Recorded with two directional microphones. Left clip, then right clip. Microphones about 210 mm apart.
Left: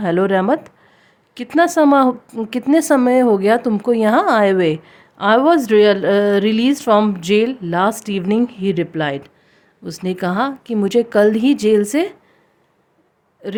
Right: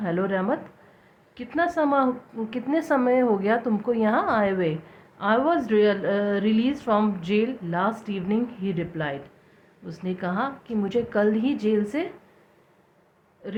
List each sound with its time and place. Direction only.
0.0 s a woman's voice: 65° left (ahead or behind)
13.4 s a woman's voice: 65° left (ahead or behind)